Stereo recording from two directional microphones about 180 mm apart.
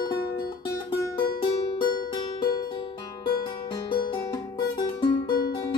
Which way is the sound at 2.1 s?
25° left (ahead or behind).